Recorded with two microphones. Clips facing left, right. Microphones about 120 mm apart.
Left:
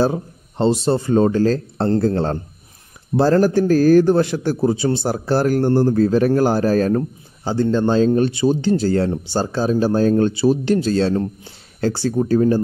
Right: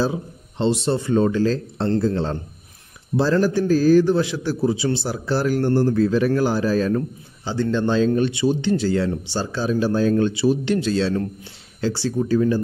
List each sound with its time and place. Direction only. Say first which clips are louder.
0.0 s a man's voice: left 4 dB; 45° left (ahead or behind)